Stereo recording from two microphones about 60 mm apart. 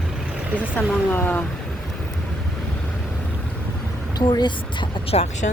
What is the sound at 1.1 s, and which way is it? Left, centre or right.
Speech, left.